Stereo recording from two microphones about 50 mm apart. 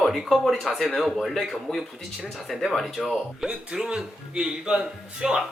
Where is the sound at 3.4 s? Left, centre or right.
Centre.